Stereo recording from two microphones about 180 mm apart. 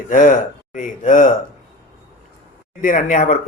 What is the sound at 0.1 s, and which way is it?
Speech, 45° left (ahead or behind).